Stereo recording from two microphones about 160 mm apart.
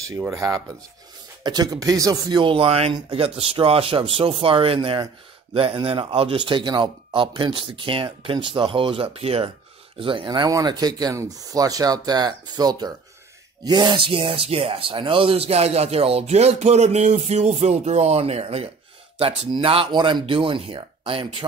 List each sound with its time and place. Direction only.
0.2 s speech: 20° right (ahead or behind)